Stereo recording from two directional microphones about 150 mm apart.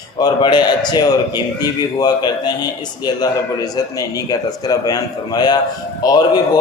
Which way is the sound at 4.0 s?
25° left (ahead or behind).